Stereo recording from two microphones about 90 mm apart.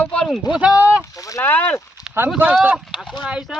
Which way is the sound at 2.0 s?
45° left (ahead or behind).